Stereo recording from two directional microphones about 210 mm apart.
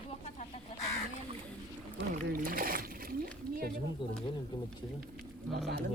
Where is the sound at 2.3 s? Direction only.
40° right (ahead or behind).